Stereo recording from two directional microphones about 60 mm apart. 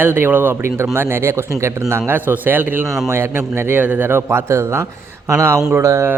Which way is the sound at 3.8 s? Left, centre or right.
Right.